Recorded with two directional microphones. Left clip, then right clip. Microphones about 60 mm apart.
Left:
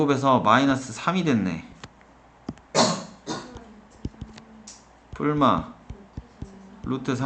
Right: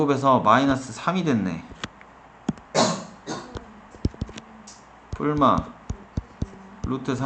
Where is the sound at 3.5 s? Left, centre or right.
Right.